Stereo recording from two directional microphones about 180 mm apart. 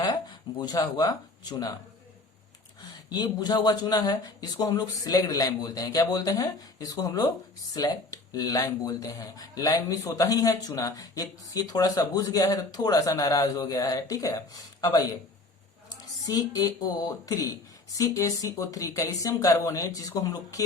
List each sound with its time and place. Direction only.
0.6 s speech: 20° left (ahead or behind)
3.1 s speech: 25° left (ahead or behind)
16.2 s speech: 20° left (ahead or behind)